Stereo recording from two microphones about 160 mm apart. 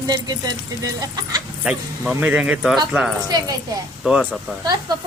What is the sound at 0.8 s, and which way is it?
Speech, 25° right (ahead or behind).